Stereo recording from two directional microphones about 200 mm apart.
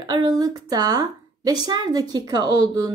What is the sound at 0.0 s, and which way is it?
A woman's voice, 20° right (ahead or behind).